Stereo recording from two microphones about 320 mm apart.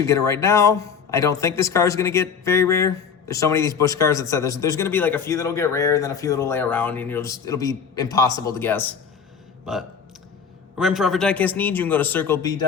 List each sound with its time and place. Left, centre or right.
0.0 s a man's voice: centre